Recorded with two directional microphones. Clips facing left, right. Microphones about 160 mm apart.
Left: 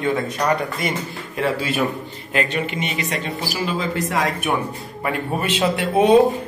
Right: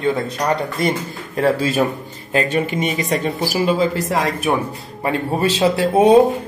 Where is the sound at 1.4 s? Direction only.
40° right (ahead or behind).